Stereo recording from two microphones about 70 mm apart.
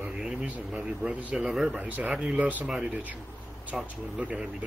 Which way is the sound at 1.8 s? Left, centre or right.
Right.